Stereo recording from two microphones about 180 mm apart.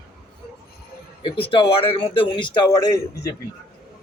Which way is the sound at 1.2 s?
30° left (ahead or behind).